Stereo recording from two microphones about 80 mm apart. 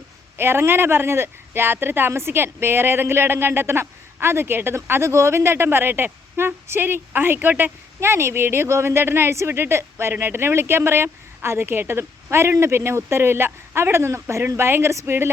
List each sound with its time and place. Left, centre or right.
0.3 s speech: right